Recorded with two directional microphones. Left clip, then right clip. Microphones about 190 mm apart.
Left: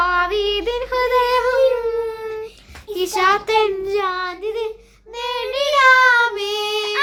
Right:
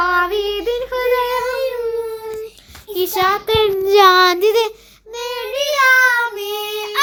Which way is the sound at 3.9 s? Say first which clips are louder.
Right 12 dB; 60° right (ahead or behind).